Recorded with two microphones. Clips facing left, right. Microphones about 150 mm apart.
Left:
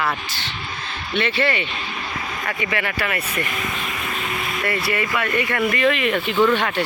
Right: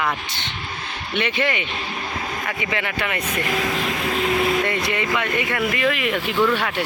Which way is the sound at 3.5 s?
90° right.